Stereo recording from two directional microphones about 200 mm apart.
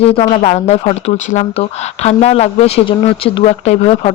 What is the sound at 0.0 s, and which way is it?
Speech, 30° left (ahead or behind).